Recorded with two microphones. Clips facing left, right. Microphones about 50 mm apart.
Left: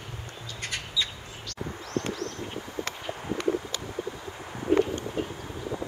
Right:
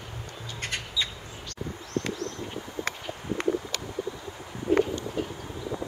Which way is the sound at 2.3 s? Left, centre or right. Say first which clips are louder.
Even; centre.